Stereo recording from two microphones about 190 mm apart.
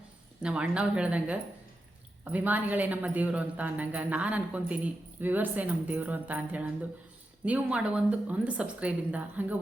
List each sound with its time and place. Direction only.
0.4 s a woman's voice: 5° right (ahead or behind)